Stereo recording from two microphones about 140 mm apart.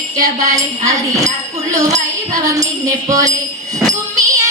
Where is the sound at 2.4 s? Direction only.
25° right (ahead or behind).